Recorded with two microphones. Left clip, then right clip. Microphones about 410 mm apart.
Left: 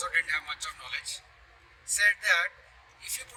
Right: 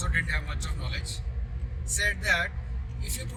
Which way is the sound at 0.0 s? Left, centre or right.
Centre.